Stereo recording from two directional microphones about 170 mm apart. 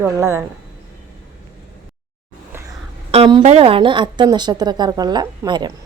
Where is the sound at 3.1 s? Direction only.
30° right (ahead or behind).